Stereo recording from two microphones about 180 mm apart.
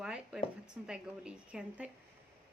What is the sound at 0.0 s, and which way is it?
A woman's voice, 5° right (ahead or behind).